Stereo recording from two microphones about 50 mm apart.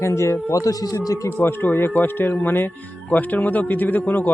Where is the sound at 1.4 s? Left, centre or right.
Left.